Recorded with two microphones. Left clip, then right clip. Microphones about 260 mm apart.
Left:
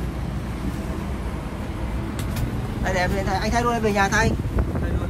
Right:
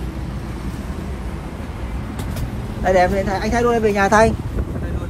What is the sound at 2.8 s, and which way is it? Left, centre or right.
Speech, centre.